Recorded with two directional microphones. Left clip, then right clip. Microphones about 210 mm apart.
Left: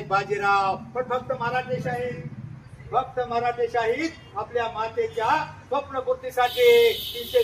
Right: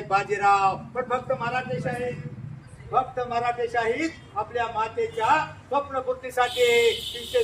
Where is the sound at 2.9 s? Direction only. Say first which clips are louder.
Even; 20° right (ahead or behind).